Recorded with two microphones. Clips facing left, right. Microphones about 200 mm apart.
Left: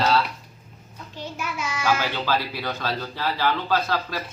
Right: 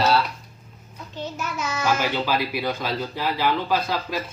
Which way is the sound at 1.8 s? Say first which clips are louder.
Right 1 dB; 15° right (ahead or behind).